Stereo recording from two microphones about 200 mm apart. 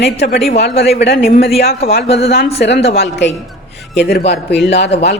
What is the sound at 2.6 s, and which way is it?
A man's voice, 55° left (ahead or behind).